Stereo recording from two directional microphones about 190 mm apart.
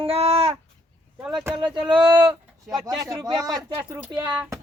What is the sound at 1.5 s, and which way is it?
A child's voice, 25° right (ahead or behind).